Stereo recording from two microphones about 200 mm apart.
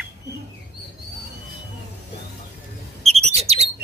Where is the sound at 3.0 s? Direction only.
30° right (ahead or behind).